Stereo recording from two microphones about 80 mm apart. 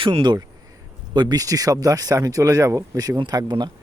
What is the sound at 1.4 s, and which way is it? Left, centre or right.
Speech, right.